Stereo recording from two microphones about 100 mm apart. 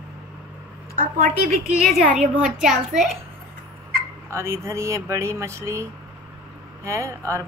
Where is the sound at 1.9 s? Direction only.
5° right (ahead or behind).